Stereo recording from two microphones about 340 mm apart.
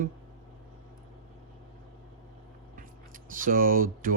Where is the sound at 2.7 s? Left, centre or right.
Right.